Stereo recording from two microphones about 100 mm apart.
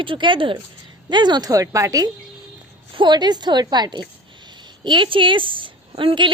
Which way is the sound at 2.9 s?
45° right (ahead or behind).